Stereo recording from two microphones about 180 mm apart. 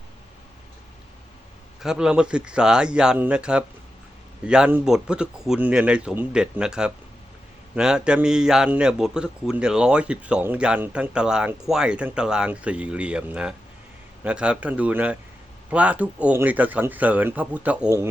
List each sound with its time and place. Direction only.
1.8 s a man's voice: 5° right (ahead or behind)